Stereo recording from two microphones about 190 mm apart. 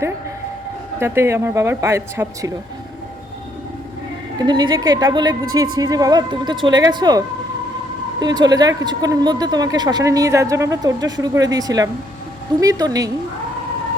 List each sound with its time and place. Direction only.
0.9 s speech: 15° right (ahead or behind)
4.4 s speech: 25° right (ahead or behind)